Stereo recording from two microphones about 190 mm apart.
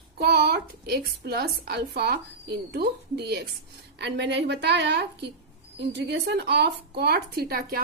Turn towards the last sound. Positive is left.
turn(degrees=-50)  # may be behind; listen again after turning